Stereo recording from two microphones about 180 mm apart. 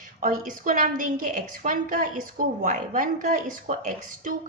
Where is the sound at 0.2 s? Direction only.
50° right (ahead or behind).